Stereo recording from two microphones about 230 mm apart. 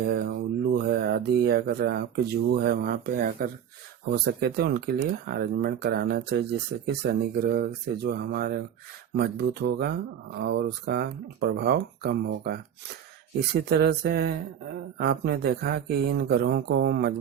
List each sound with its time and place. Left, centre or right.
0.1 s speech: right